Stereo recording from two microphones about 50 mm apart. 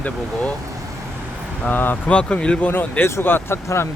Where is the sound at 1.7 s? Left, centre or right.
Left.